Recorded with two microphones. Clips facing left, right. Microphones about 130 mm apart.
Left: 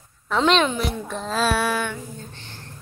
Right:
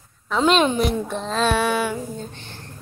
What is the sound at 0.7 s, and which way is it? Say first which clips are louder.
Speech: right 5 dB; 20° right (ahead or behind).